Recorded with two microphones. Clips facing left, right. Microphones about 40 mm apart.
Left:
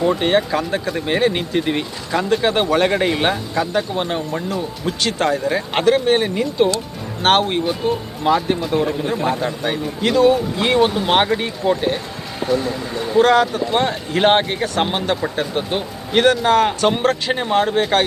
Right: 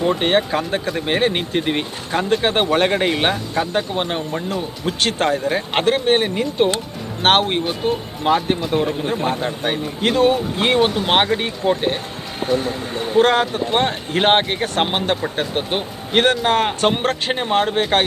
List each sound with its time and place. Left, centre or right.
0.0 s speech: right
0.3 s speech: right
0.9 s speech: right
3.1 s speech: right
4.9 s speech: right
8.8 s speech: centre
9.0 s speech: right
11.0 s speech: right